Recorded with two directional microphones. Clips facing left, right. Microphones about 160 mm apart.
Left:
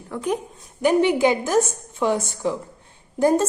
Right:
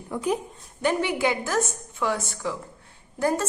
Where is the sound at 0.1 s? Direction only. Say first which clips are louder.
Left 1 dB; 5° right (ahead or behind).